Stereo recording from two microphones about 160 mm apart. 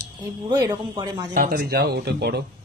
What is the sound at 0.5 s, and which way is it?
Speech, 25° right (ahead or behind).